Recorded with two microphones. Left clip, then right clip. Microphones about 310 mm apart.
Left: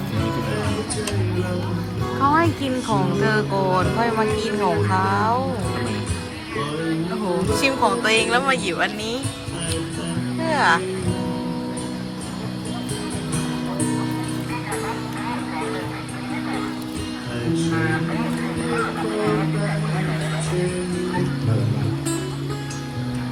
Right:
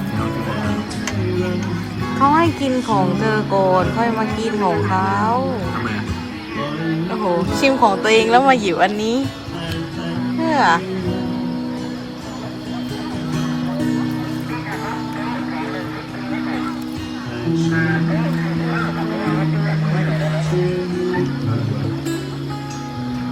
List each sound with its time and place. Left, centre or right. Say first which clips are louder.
2.2 s speech: right 4 dB; centre
3.2 s music: right 4 dB; centre
7.6 s speech: right 5 dB; centre
10.4 s speech: right 3 dB; centre